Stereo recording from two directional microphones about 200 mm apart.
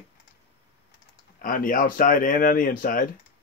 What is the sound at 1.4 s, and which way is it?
Speech, 45° left (ahead or behind).